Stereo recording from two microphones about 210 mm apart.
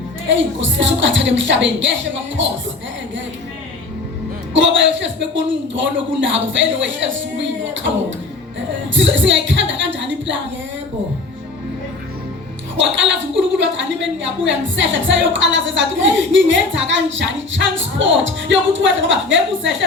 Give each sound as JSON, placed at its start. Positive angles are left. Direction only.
{"t": 0.3, "sound": "a woman's voice", "side_deg": -60}
{"t": 4.5, "sound": "a woman's voice", "side_deg": -60}
{"t": 9.0, "sound": "a sound", "side_deg": -60}
{"t": 12.7, "sound": "a woman's voice", "side_deg": -60}